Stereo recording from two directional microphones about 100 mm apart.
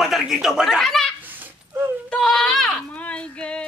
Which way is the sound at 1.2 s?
20° right (ahead or behind).